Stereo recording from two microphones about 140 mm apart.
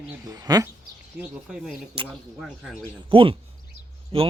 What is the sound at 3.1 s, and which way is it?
Speech, 40° right (ahead or behind).